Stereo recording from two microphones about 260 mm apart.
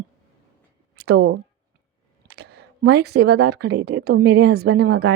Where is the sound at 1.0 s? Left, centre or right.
Right.